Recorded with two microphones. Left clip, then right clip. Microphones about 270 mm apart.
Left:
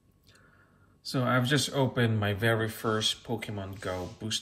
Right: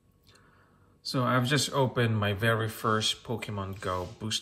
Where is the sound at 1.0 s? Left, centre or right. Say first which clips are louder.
Even; centre.